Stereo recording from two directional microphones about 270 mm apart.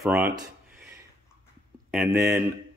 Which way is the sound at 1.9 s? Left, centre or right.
Centre.